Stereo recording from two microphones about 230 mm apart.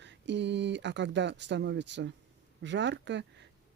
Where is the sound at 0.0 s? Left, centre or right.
Right.